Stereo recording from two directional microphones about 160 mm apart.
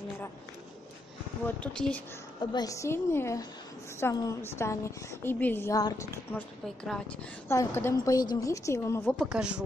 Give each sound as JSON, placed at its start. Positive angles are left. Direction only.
{"t": 1.4, "sound": "a woman's voice", "side_deg": 5}
{"t": 2.5, "sound": "a woman's voice", "side_deg": 20}
{"t": 6.3, "sound": "a woman's voice", "side_deg": 5}
{"t": 7.5, "sound": "speech", "side_deg": 15}
{"t": 9.1, "sound": "speech", "side_deg": 0}